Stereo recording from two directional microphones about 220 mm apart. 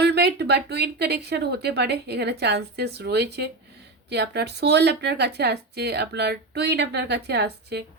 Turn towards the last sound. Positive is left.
turn(degrees=-50)  # may be behind; listen again after turning